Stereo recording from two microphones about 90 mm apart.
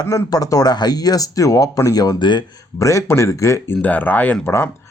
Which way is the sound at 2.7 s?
35° left (ahead or behind).